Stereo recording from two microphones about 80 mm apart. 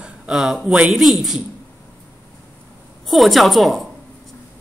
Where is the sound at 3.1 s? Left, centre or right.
Centre.